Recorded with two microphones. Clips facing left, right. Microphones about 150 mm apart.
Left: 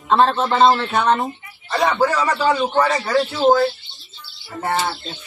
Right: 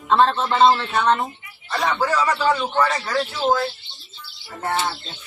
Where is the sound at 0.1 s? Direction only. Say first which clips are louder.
Left 2 dB; 5° left (ahead or behind).